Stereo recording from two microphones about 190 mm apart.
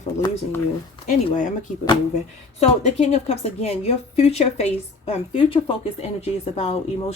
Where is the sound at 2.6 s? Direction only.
35° left (ahead or behind).